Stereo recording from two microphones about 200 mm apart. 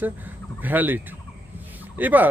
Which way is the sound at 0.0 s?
10° right (ahead or behind).